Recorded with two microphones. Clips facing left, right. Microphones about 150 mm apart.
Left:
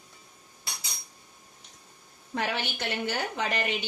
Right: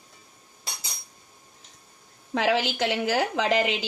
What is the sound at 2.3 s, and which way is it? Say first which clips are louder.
A woman's voice: right 7 dB; 90° right.